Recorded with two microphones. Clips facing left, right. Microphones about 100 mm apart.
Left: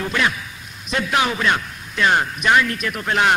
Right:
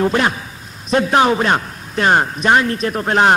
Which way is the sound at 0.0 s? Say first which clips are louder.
Right 6 dB; 35° right (ahead or behind).